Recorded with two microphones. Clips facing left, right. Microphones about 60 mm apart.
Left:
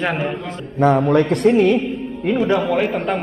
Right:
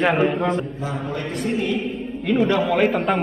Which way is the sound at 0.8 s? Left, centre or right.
Left.